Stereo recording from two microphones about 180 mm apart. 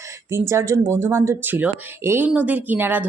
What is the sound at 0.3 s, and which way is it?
Speech, 15° right (ahead or behind).